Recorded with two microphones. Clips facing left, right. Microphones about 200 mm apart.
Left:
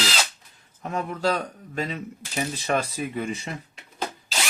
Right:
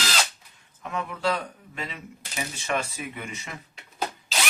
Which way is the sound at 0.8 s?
40° left (ahead or behind).